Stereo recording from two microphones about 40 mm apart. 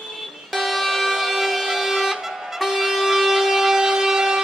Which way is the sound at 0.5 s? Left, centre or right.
Centre.